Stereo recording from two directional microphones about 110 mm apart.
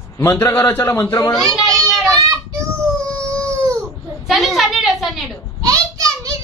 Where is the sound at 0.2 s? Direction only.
25° left (ahead or behind).